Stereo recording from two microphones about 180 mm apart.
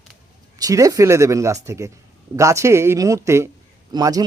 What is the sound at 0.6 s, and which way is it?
Speech, 20° right (ahead or behind).